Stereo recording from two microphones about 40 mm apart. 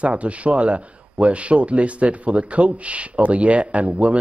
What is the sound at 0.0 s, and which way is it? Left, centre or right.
A man's voice, right.